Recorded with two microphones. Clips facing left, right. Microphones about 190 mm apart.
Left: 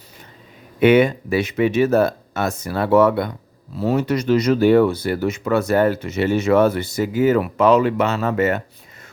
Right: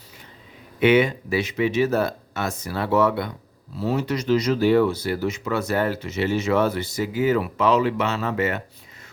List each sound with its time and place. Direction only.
0.8 s speech: 50° left (ahead or behind)